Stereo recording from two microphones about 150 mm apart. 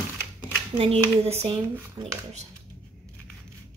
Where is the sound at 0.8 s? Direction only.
40° right (ahead or behind).